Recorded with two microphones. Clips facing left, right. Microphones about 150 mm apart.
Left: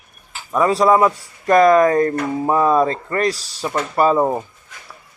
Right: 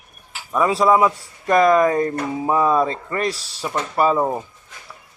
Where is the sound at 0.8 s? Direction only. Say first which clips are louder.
Left 1 dB; 5° right (ahead or behind).